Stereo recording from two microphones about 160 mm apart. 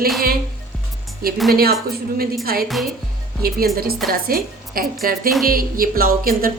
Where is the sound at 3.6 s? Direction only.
70° right (ahead or behind).